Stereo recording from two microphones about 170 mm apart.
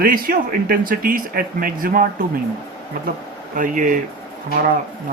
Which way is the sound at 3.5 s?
50° right (ahead or behind).